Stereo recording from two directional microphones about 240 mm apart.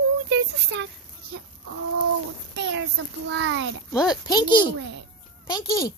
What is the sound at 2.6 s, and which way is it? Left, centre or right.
Speech, right.